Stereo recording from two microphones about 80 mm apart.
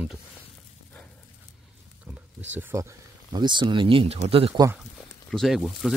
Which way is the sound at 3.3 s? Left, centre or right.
Right.